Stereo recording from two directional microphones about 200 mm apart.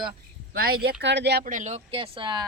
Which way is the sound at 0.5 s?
50° right (ahead or behind).